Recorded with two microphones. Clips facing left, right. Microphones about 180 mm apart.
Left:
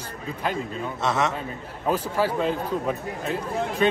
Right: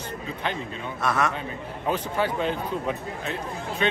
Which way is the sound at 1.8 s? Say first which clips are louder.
Left 2 dB; 5° left (ahead or behind).